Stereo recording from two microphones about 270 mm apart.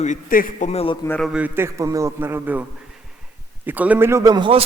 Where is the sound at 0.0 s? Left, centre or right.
Left.